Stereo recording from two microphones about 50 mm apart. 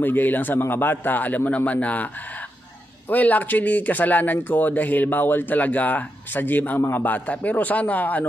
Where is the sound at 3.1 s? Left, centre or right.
Left.